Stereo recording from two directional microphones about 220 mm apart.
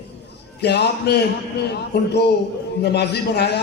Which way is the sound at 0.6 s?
50° left (ahead or behind).